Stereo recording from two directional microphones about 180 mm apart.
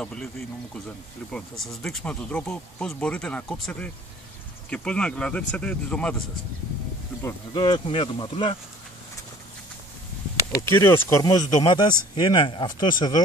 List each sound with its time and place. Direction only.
0.0 s speech: 5° left (ahead or behind)
7.2 s speech: 25° left (ahead or behind)
10.6 s speech: 15° left (ahead or behind)